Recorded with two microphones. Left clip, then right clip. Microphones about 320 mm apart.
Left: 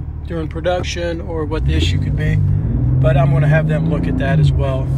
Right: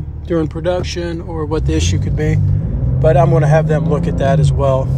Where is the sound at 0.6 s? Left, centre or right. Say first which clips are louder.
Right 1 dB; centre.